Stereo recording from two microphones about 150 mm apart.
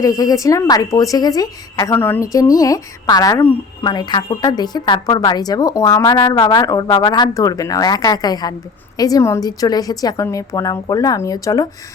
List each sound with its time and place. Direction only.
0.0 s a woman's voice: 25° left (ahead or behind)